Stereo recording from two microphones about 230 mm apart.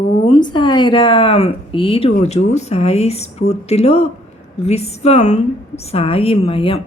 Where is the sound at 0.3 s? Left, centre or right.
Centre.